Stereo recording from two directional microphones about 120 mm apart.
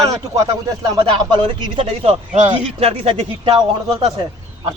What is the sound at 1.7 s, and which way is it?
A man's voice, 50° right (ahead or behind).